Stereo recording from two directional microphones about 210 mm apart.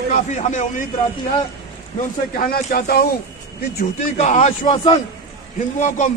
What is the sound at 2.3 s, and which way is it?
Speech, 45° left (ahead or behind).